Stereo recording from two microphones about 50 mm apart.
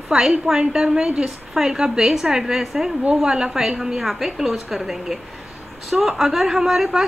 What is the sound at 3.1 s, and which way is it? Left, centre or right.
A woman's voice, centre.